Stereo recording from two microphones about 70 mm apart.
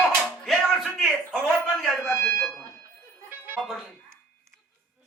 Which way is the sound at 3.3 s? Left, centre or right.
Right.